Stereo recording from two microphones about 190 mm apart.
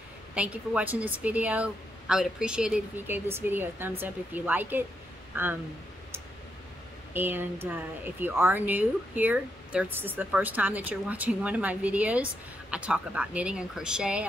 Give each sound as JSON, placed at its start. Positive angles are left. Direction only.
{"t": 0.3, "sound": "speech", "side_deg": -5}
{"t": 7.2, "sound": "speech", "side_deg": -10}